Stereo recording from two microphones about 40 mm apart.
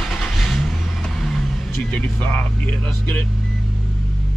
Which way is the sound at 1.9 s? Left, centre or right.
Left.